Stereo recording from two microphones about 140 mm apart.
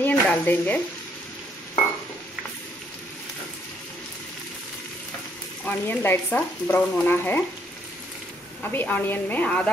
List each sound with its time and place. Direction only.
0.0 s a sound: 15° left (ahead or behind)
5.7 s frying: 15° left (ahead or behind)
8.6 s frying: 15° left (ahead or behind)